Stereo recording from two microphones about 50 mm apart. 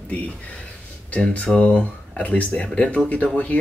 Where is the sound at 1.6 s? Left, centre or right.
Left.